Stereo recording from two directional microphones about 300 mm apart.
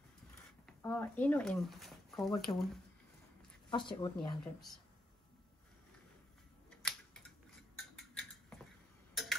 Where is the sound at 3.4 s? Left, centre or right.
Centre.